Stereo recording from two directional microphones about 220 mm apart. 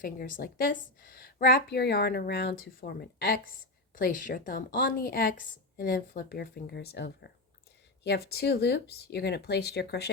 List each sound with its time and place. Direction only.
0.0 s a woman's voice: 40° left (ahead or behind)